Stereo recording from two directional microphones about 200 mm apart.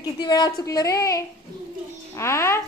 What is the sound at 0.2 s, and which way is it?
A woman's voice, 20° left (ahead or behind).